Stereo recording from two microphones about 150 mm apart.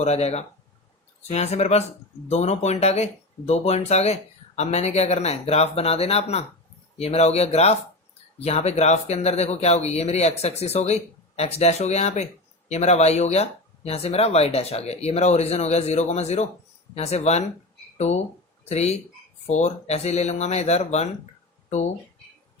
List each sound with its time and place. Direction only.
0.0 s speech: 45° left (ahead or behind)